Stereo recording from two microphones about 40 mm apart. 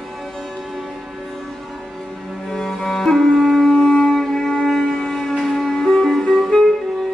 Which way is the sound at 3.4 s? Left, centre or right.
Centre.